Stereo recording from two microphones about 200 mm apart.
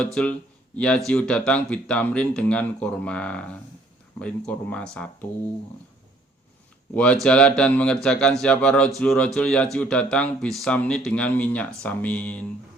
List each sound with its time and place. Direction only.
0.0 s speech: 5° left (ahead or behind)
6.9 s speech: 5° left (ahead or behind)